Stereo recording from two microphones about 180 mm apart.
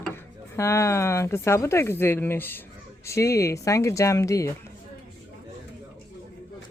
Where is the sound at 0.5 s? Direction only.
15° left (ahead or behind).